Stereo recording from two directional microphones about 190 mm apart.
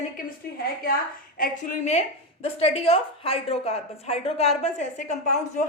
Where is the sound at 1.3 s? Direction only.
45° left (ahead or behind).